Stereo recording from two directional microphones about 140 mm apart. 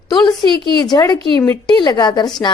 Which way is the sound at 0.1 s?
30° left (ahead or behind).